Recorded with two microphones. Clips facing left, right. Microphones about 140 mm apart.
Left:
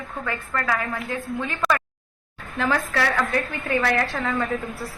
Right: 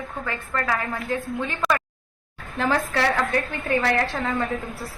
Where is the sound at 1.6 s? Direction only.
Centre (ahead or behind).